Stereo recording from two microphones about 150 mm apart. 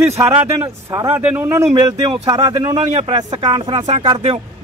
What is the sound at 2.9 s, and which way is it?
Speech, 45° right (ahead or behind).